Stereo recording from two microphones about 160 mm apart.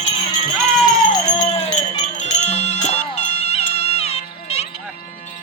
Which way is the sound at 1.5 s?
40° left (ahead or behind).